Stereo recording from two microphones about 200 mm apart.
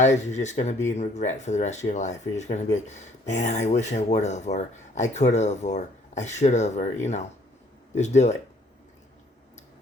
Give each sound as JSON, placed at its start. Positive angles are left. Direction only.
{"t": 0.0, "sound": "speech", "side_deg": 35}
{"t": 7.9, "sound": "speech", "side_deg": 35}